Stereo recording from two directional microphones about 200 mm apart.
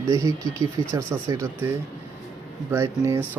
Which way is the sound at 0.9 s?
15° right (ahead or behind).